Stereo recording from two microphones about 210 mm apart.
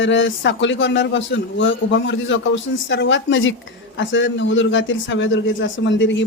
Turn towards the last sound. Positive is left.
turn(degrees=60)  # may be behind; listen again after turning